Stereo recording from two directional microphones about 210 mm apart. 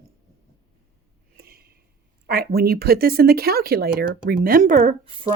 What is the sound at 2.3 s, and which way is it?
Speech, 45° right (ahead or behind).